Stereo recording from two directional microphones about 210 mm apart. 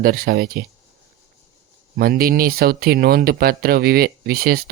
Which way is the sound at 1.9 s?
45° right (ahead or behind).